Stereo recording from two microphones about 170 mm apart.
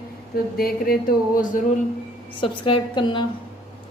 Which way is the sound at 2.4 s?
30° left (ahead or behind).